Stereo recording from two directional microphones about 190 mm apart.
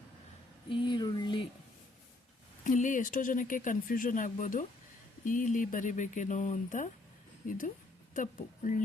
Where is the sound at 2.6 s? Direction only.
40° left (ahead or behind).